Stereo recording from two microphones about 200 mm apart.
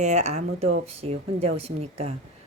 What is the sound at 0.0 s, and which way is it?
Speech, 35° right (ahead or behind).